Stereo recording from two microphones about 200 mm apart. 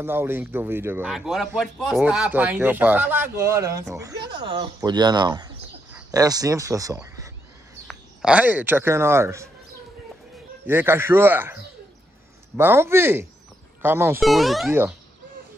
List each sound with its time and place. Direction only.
0.0 s a man's voice: 10° right (ahead or behind)
7.9 s speech: 5° right (ahead or behind)
10.7 s a man's voice: 10° right (ahead or behind)
14.2 s a man's voice: centre (ahead or behind)